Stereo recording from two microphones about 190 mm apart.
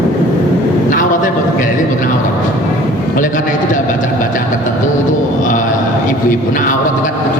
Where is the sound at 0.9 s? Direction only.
45° left (ahead or behind).